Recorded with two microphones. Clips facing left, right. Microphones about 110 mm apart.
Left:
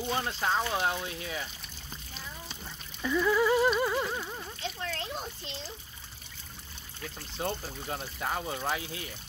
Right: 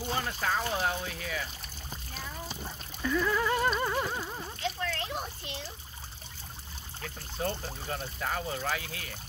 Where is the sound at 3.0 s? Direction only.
5° left (ahead or behind).